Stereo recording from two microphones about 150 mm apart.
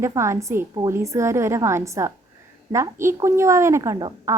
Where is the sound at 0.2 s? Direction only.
20° right (ahead or behind).